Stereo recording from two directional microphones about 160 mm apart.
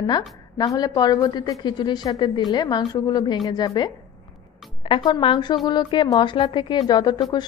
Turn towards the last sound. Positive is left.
turn(degrees=25)  # may be behind; listen again after turning